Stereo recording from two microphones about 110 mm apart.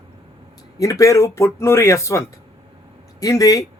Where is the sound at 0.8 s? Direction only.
30° left (ahead or behind).